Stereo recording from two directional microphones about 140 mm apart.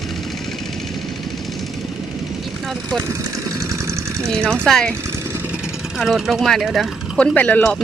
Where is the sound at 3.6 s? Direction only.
20° right (ahead or behind).